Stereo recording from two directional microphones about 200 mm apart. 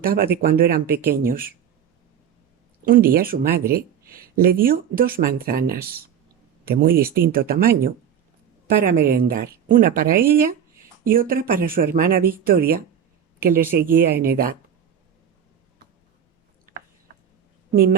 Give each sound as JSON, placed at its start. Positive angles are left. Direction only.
{"t": 0.0, "sound": "speech", "side_deg": -50}
{"t": 2.8, "sound": "speech", "side_deg": -45}
{"t": 17.7, "sound": "speech", "side_deg": -50}